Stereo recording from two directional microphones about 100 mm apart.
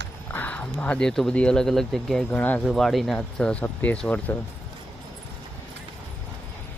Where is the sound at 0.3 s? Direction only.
15° left (ahead or behind).